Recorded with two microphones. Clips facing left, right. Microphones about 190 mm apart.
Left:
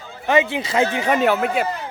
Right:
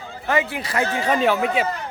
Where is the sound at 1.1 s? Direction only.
5° left (ahead or behind).